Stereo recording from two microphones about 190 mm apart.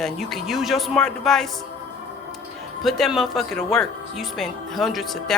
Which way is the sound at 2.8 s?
Centre (ahead or behind).